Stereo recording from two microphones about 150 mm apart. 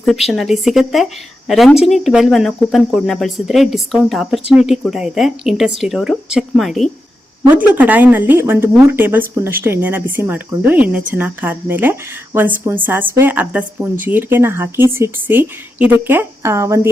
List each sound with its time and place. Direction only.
0.3 s speech: centre (ahead or behind)
7.5 s speech: 10° right (ahead or behind)